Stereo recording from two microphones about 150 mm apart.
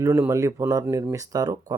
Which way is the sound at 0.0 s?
20° right (ahead or behind).